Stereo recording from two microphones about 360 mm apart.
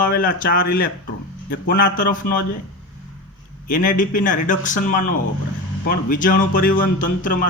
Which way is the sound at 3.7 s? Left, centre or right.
Left.